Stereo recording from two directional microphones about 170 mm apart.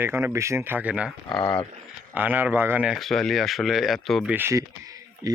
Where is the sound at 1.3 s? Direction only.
30° left (ahead or behind).